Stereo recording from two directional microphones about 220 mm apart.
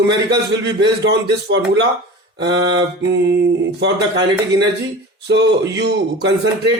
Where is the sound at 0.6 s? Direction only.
50° right (ahead or behind).